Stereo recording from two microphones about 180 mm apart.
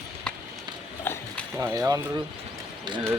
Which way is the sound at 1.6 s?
20° right (ahead or behind).